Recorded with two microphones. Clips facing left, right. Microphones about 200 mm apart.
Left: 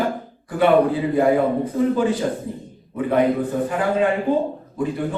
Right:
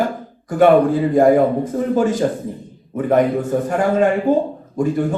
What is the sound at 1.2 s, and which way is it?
A man's voice, 45° right (ahead or behind).